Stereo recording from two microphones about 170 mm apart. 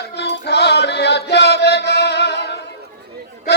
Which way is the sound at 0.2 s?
80° left.